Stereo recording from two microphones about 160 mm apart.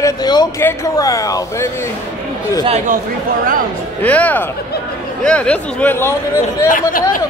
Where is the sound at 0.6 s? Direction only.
20° left (ahead or behind).